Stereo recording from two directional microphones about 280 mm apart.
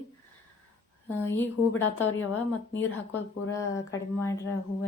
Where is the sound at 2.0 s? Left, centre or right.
Left.